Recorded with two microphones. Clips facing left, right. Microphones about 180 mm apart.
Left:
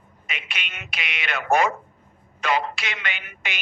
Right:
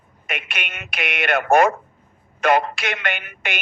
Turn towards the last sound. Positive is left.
turn(degrees=-55)  # may be behind; listen again after turning